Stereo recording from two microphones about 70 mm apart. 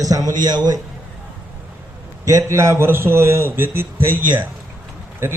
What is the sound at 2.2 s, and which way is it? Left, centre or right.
A man's voice, right.